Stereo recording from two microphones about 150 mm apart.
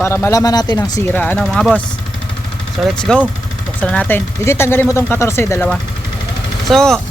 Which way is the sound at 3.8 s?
10° left (ahead or behind).